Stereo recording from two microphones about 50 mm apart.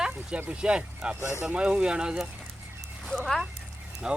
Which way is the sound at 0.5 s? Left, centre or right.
Centre.